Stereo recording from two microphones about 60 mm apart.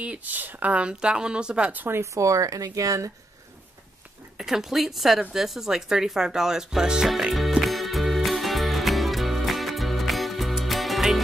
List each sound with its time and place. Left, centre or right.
0.0 s speech: right
1.9 s speech: right
2.2 s speech: right
4.4 s a woman's voice: centre
7.3 s music: centre